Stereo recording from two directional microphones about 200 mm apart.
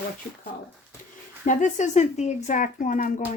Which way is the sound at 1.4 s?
35° left (ahead or behind).